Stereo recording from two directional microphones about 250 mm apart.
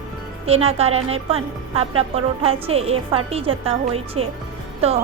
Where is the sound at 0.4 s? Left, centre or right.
Right.